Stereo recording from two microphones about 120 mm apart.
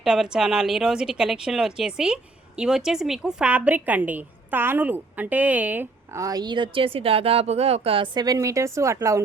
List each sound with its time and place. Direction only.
0.0 s a woman's voice: 5° right (ahead or behind)
6.1 s speech: 30° right (ahead or behind)